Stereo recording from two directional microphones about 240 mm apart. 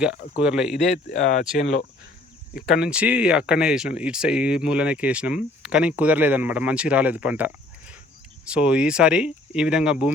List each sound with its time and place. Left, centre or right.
0.0 s speech: centre
0.8 s speech: left
2.6 s speech: centre